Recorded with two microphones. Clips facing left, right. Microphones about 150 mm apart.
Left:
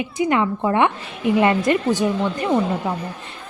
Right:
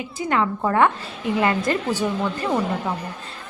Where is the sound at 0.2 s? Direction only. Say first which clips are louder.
Left 3 dB; 20° left (ahead or behind).